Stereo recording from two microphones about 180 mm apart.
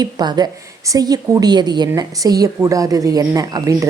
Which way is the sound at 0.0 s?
25° right (ahead or behind).